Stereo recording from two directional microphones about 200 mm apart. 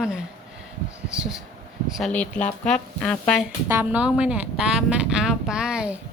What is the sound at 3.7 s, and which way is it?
Speech, 10° right (ahead or behind).